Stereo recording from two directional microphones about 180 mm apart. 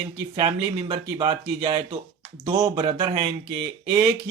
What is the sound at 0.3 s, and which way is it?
Speech, 25° right (ahead or behind).